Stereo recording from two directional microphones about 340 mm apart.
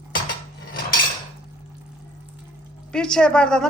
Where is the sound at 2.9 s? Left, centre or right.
Centre.